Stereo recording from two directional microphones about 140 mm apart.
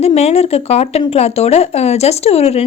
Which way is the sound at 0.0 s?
50° left (ahead or behind).